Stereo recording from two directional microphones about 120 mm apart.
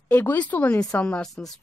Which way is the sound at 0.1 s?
15° left (ahead or behind).